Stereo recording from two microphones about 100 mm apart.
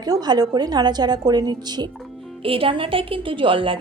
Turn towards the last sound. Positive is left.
turn(degrees=-60)  # may be behind; listen again after turning